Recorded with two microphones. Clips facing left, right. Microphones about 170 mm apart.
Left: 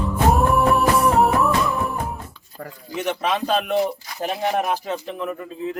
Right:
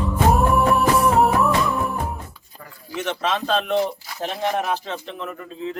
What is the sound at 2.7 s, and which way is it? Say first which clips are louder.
Speech: left 2 dB; 15° left (ahead or behind).